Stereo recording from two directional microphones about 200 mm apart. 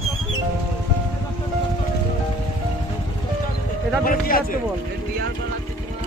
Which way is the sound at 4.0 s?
45° left (ahead or behind).